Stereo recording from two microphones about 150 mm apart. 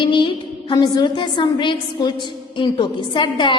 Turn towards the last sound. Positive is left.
turn(degrees=30)  # may be behind; listen again after turning